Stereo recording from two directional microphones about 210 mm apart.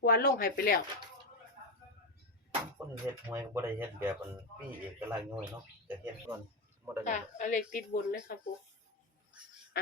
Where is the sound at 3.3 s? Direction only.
10° right (ahead or behind).